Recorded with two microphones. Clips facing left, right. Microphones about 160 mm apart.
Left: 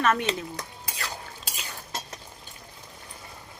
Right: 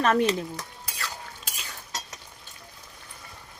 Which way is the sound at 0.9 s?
25° left (ahead or behind).